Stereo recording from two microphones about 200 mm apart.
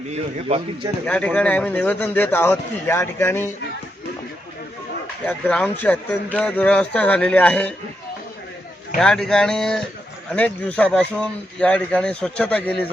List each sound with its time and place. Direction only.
0.1 s a man's voice: 30° right (ahead or behind)
1.0 s speech: 5° left (ahead or behind)
5.2 s speech: 5° left (ahead or behind)
9.0 s a man's voice: 5° left (ahead or behind)